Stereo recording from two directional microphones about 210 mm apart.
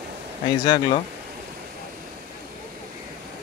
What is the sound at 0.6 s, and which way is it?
Speech, 20° left (ahead or behind).